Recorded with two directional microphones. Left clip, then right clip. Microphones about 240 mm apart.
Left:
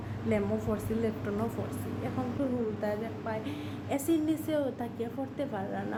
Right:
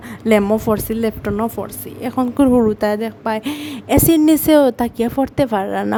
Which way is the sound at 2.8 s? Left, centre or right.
Right.